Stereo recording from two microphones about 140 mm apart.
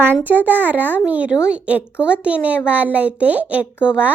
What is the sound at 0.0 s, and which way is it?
A child's voice, 15° right (ahead or behind).